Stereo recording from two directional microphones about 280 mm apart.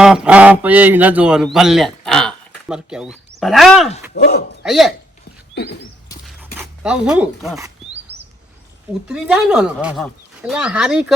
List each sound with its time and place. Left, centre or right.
0.0 s a man's voice: centre
4.1 s speech: left
4.6 s speech: centre
6.2 s dog: centre
9.0 s speech: centre